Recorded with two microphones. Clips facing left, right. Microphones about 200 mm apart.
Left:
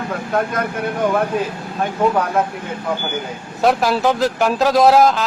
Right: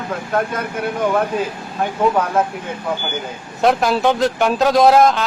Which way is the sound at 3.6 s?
Centre (ahead or behind).